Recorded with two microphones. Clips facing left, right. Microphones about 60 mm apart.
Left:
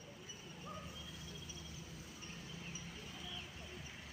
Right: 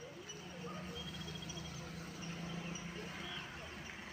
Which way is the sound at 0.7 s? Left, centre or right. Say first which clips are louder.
Right 4 dB; right.